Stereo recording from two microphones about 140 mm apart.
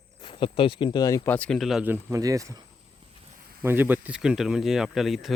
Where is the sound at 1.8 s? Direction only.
15° right (ahead or behind).